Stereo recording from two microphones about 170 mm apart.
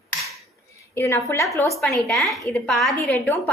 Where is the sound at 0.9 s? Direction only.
15° left (ahead or behind).